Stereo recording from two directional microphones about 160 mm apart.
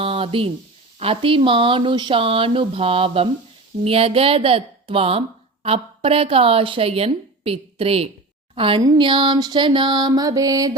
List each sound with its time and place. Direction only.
0.0 s a sound: 35° right (ahead or behind)
0.9 s a woman's voice: 35° right (ahead or behind)
8.8 s music: 30° right (ahead or behind)